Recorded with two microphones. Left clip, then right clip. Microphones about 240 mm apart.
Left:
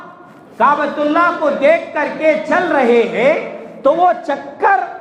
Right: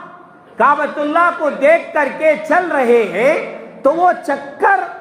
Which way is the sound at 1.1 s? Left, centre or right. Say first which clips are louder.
Right 1 dB; right.